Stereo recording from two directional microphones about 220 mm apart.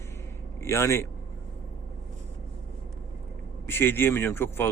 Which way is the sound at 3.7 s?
10° left (ahead or behind).